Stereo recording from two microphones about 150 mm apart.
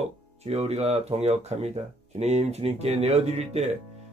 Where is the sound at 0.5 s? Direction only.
45° right (ahead or behind).